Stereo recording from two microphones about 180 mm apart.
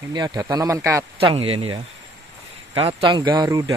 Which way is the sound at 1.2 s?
30° right (ahead or behind).